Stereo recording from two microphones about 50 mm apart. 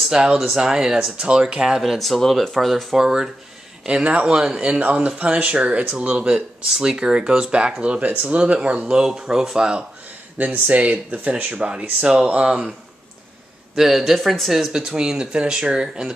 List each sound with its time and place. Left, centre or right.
0.1 s speech: centre
1.8 s speech: centre
3.0 s speech: centre
3.8 s speech: right
8.0 s speech: right
9.0 s speech: centre
10.3 s speech: right
11.5 s speech: centre
13.7 s speech: centre
14.7 s speech: centre